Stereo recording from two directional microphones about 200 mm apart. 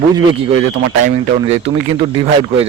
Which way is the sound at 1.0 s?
30° right (ahead or behind).